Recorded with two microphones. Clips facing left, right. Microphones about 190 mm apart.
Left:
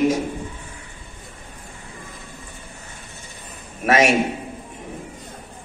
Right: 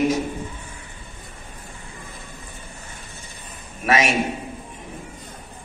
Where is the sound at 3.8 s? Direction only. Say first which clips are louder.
Left 4 dB; 45° left (ahead or behind).